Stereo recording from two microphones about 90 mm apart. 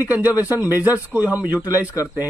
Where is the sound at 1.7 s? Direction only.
35° left (ahead or behind).